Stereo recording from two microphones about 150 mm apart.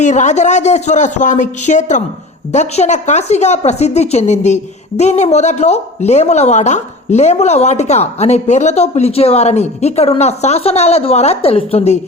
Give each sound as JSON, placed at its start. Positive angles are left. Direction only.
{"t": 0.0, "sound": "a woman's voice", "side_deg": 50}